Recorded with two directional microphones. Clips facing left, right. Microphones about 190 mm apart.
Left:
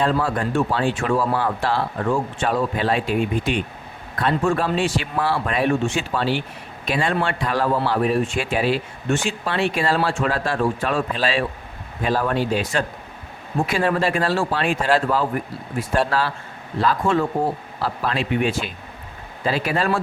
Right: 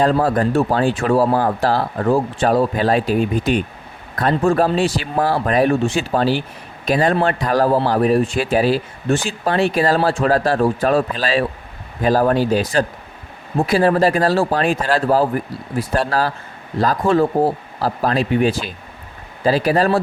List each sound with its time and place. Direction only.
0.0 s speech: 40° right (ahead or behind)